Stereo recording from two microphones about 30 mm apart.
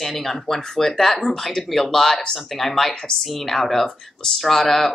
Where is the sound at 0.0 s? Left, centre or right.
Centre.